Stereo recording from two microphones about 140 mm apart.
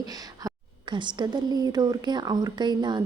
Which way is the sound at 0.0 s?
30° right (ahead or behind).